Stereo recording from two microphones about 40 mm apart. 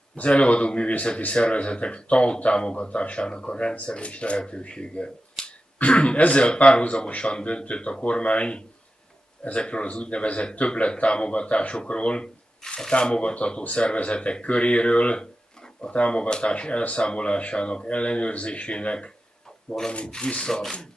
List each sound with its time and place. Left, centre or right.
0.1 s speech: left
5.4 s finger snapping: centre
5.8 s speech: left